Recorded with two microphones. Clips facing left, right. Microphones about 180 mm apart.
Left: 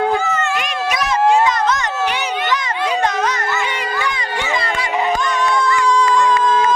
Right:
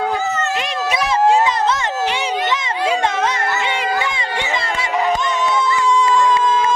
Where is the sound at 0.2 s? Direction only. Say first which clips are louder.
Left 1 dB; 35° right (ahead or behind).